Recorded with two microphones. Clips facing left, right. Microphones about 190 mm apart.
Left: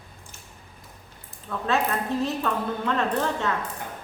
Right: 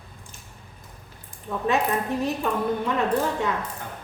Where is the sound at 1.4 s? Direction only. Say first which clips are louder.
Right 2 dB; 15° right (ahead or behind).